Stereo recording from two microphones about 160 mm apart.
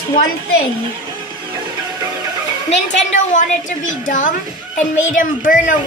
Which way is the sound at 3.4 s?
50° left (ahead or behind).